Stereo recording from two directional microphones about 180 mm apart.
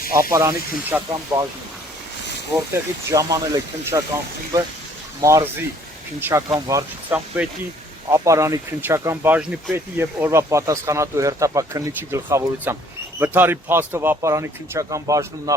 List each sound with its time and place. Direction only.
0.1 s speech: 15° right (ahead or behind)
2.7 s speech: 20° right (ahead or behind)
5.2 s speech: 15° right (ahead or behind)